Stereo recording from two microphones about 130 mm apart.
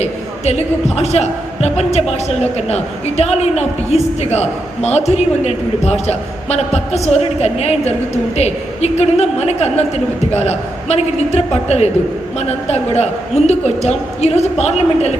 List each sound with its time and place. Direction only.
0.0 s a man's voice: 55° left (ahead or behind)